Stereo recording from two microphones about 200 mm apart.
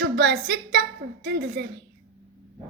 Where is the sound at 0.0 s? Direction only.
55° right (ahead or behind).